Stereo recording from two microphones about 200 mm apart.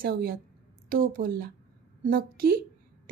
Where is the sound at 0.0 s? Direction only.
50° right (ahead or behind).